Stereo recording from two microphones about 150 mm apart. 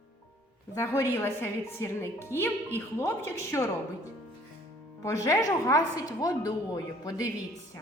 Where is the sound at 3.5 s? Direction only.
20° left (ahead or behind).